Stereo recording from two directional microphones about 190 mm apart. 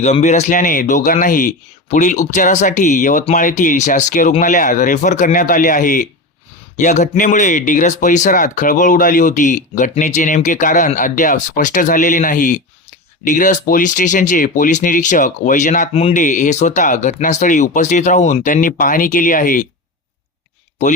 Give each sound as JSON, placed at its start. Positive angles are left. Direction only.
{"t": 0.0, "sound": "speech", "side_deg": 35}